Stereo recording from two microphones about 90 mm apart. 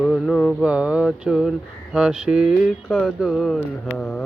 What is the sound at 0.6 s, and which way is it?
Speech, 15° right (ahead or behind).